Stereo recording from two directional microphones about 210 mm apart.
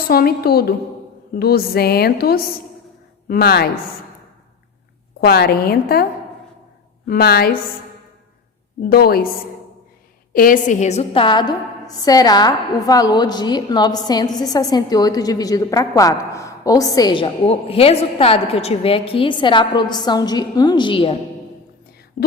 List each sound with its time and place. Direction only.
0.1 s a woman's voice: 45° left (ahead or behind)
5.2 s a woman's voice: 50° left (ahead or behind)
7.1 s a woman's voice: 45° left (ahead or behind)
8.8 s a woman's voice: 45° left (ahead or behind)
10.3 s a woman's voice: 40° left (ahead or behind); by 21.2 s 25° left (ahead or behind)